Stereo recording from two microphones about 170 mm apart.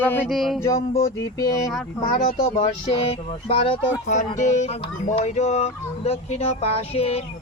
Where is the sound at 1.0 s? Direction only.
20° left (ahead or behind).